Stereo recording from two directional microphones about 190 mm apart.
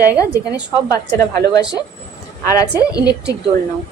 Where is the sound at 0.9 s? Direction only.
20° left (ahead or behind).